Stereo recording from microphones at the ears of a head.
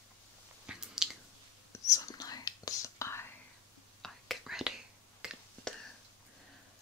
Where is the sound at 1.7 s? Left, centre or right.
Left.